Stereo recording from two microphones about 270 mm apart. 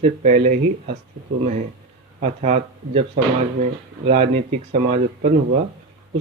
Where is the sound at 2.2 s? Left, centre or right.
Right.